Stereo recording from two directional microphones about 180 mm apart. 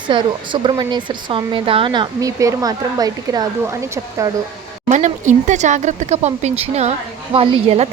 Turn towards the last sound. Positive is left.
turn(degrees=-35)  # may be behind; listen again after turning